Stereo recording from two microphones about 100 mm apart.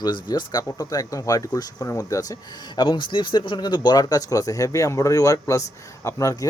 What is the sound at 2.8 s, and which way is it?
Speech, 55° left (ahead or behind).